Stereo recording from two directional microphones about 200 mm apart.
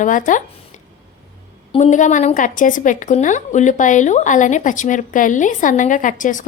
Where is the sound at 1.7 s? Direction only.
35° left (ahead or behind).